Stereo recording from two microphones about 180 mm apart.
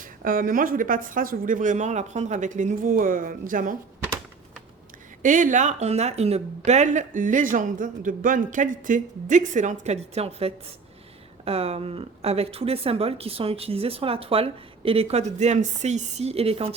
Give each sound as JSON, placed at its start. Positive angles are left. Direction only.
{"t": 0.0, "sound": "speech", "side_deg": -50}
{"t": 5.2, "sound": "speech", "side_deg": -45}